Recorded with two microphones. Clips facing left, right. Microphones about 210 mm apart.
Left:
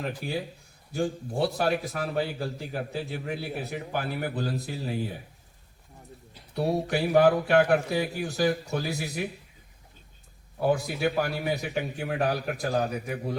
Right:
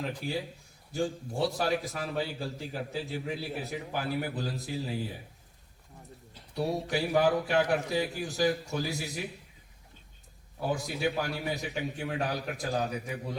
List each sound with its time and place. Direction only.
1.0 s a man's voice: 60° left (ahead or behind)
6.5 s a man's voice: 60° left (ahead or behind)
10.6 s a man's voice: 60° left (ahead or behind)